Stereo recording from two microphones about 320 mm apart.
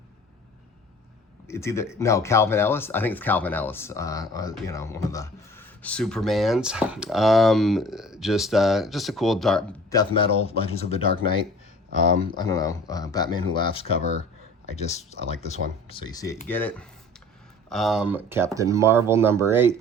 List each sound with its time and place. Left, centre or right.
1.5 s speech: centre
10.2 s speech: centre
12.4 s speech: centre